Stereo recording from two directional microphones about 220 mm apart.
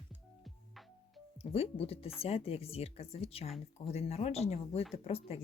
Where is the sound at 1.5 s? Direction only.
25° left (ahead or behind).